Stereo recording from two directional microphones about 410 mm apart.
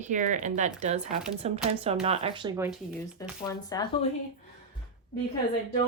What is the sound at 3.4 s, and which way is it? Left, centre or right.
Speech, centre.